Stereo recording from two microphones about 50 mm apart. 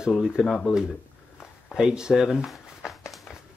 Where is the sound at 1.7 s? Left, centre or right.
Centre.